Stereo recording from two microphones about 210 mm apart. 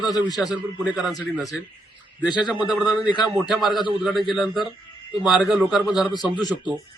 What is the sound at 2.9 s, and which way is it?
Speech, 20° left (ahead or behind).